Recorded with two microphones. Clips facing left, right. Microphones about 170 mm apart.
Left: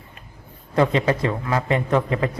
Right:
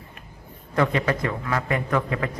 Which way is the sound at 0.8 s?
25° left (ahead or behind).